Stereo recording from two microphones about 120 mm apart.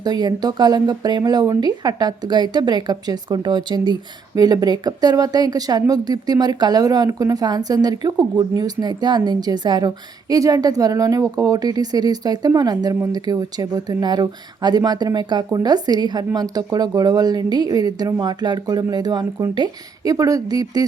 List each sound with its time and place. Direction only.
0.0 s a woman's voice: 35° right (ahead or behind)